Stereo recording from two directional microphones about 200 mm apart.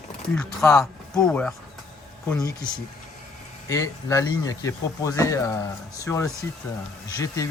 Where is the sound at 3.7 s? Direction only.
15° left (ahead or behind).